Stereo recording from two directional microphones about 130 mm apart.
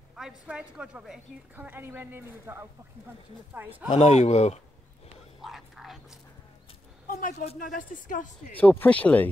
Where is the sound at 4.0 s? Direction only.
60° left (ahead or behind).